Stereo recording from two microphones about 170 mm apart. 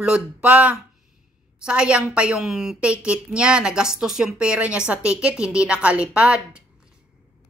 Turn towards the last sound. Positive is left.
turn(degrees=-5)  # may be behind; listen again after turning